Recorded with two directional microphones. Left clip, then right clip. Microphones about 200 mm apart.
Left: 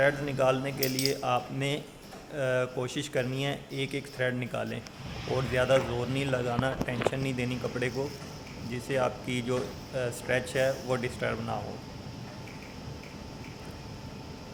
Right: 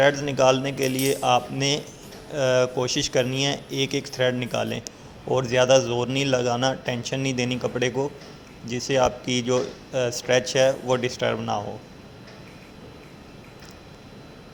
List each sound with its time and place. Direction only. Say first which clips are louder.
0.0 s speech: right 7 dB; 20° right (ahead or behind)